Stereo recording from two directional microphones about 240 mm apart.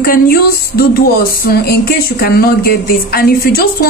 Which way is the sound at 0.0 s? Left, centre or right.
Left.